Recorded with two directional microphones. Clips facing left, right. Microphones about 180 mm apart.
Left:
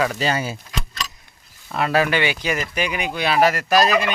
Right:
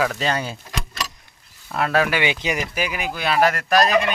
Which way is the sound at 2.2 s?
20° right (ahead or behind).